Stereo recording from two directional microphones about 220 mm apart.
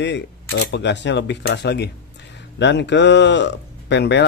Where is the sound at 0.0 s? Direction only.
60° left (ahead or behind).